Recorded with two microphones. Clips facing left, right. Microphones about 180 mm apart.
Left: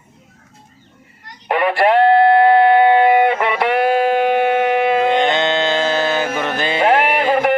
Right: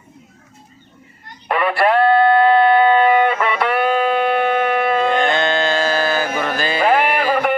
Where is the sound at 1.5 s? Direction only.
15° left (ahead or behind).